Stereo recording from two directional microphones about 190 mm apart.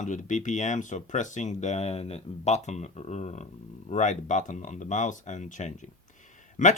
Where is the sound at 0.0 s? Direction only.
40° left (ahead or behind).